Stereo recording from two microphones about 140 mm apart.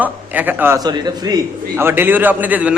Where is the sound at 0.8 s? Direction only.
30° right (ahead or behind).